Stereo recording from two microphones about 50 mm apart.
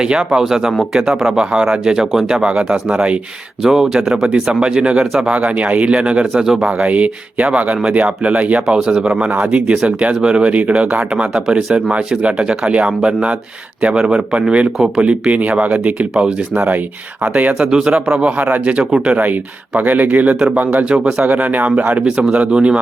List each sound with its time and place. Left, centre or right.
0.0 s speech: centre
3.6 s speech: centre
6.4 s speech: centre
6.7 s speech: right
9.3 s speech: right
15.3 s speech: right
16.6 s speech: right
17.2 s speech: right
20.9 s speech: centre
21.2 s speech: right